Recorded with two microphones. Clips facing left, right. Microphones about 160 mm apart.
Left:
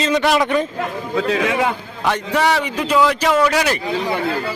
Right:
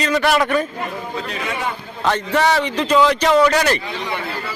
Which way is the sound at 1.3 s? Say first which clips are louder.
Left 8 dB; 90° left.